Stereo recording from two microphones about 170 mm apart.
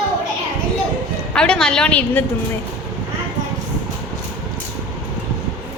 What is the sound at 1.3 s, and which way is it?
Speech, 5° left (ahead or behind).